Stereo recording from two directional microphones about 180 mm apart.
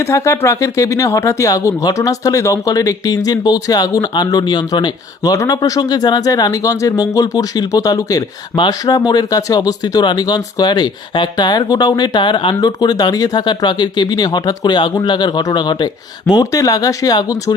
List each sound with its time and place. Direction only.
0.0 s speech: 15° left (ahead or behind)